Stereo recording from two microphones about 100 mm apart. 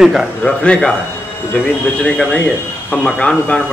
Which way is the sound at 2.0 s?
10° left (ahead or behind).